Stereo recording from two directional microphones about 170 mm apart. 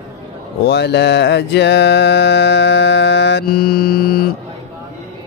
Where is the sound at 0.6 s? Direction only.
80° left; by 4.2 s 65° left (ahead or behind).